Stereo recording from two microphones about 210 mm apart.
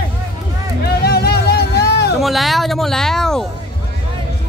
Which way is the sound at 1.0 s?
50° left (ahead or behind).